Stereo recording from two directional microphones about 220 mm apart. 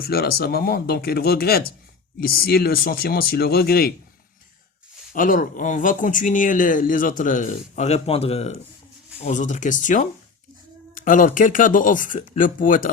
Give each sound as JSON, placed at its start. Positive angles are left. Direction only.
{"t": 0.1, "sound": "speech", "side_deg": 45}
{"t": 5.1, "sound": "speech", "side_deg": 40}